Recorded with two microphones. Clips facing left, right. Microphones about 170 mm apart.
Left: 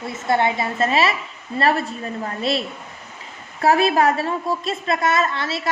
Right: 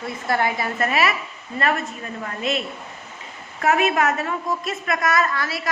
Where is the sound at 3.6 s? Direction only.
35° left (ahead or behind).